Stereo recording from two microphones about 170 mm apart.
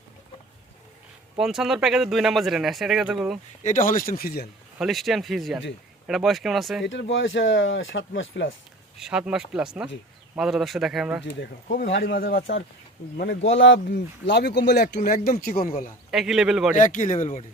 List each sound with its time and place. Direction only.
1.4 s speech: 5° right (ahead or behind)
3.6 s speech: 50° left (ahead or behind)
4.8 s speech: centre (ahead or behind)
6.8 s speech: 90° left
9.0 s speech: 5° right (ahead or behind)
11.9 s speech: 75° left (ahead or behind)
14.9 s speech: 55° left (ahead or behind)
16.1 s speech: centre (ahead or behind)
16.7 s speech: 50° left (ahead or behind)